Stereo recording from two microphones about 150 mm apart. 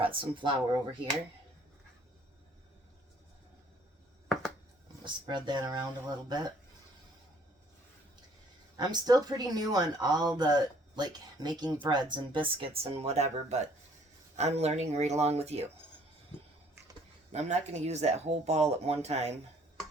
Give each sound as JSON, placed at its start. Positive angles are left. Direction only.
{"t": 0.0, "sound": "speech", "side_deg": -35}
{"t": 5.0, "sound": "speech", "side_deg": -30}
{"t": 8.8, "sound": "speech", "side_deg": -25}
{"t": 17.3, "sound": "speech", "side_deg": -50}